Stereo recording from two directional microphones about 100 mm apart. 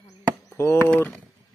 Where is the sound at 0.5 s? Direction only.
25° left (ahead or behind).